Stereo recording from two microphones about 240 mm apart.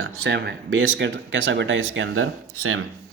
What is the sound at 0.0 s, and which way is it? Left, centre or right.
Speech, right.